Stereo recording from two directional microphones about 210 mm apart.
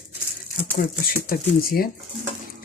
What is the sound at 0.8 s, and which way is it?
Speech, 45° left (ahead or behind).